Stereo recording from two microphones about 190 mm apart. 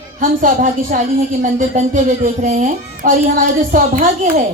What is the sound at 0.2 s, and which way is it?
Speech, 45° right (ahead or behind).